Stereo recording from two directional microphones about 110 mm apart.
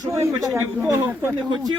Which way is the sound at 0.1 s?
30° right (ahead or behind).